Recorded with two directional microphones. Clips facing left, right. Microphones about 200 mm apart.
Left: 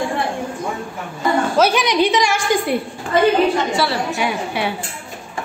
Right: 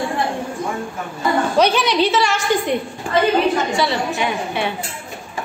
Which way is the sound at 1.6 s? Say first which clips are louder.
Even; 10° left (ahead or behind).